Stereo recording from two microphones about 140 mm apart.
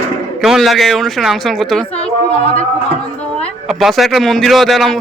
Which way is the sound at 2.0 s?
45° left (ahead or behind).